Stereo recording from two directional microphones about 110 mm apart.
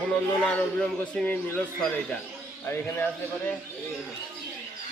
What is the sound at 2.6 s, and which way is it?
Speech, 20° left (ahead or behind).